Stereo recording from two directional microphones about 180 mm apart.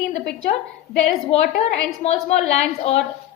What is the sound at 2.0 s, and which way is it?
Speech, 35° left (ahead or behind).